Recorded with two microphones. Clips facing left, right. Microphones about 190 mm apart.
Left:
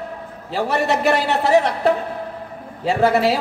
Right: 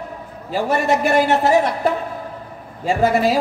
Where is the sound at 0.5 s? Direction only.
45° right (ahead or behind).